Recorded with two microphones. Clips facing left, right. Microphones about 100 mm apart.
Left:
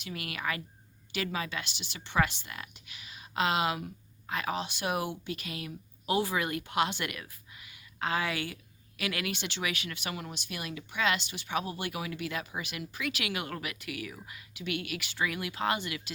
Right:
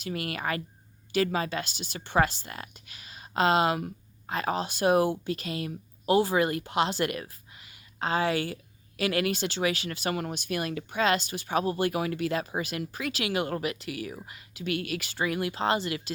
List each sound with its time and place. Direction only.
0.0 s speech: 40° right (ahead or behind)
10.1 s speech: 50° right (ahead or behind); by 16.1 s 35° right (ahead or behind)